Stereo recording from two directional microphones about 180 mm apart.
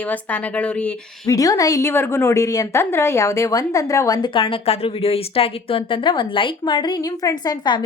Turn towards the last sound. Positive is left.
turn(degrees=25)  # may be behind; listen again after turning